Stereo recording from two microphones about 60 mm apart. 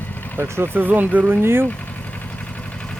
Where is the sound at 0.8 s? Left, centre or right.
Right.